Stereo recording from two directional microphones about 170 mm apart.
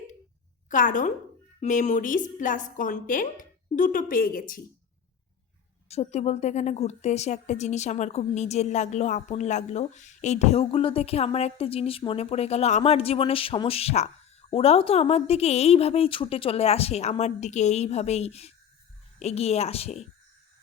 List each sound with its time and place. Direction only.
0.7 s a woman's voice: 50° left (ahead or behind)
5.9 s speech: 40° left (ahead or behind)